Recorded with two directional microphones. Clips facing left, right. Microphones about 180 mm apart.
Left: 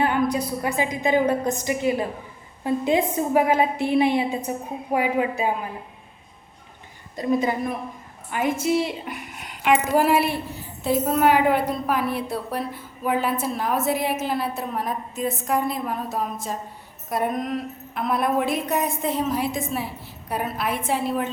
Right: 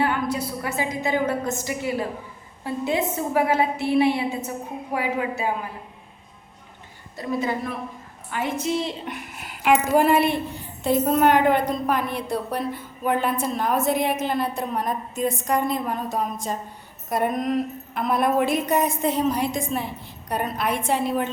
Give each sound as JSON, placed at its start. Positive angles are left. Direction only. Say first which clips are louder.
{"t": 0.0, "sound": "a woman's voice", "louder": "left 2 dB", "side_deg": 15}
{"t": 7.2, "sound": "a woman's voice", "louder": "left 3 dB", "side_deg": 20}